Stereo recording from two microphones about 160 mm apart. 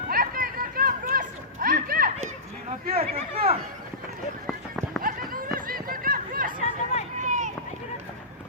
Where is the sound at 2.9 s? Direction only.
40° right (ahead or behind).